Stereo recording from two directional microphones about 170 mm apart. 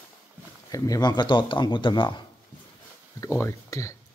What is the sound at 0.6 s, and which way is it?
Speech, 20° left (ahead or behind).